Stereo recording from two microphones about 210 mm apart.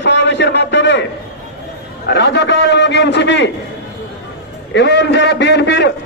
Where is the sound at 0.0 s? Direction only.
60° left (ahead or behind).